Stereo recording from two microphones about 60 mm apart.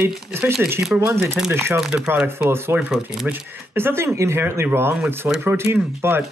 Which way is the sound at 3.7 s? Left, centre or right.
Right.